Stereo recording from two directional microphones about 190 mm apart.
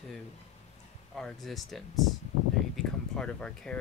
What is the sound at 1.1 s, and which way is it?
Speech, centre (ahead or behind).